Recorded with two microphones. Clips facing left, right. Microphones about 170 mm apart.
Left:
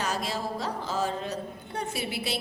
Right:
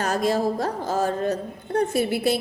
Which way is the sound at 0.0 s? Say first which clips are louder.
Right 9 dB; 50° right (ahead or behind).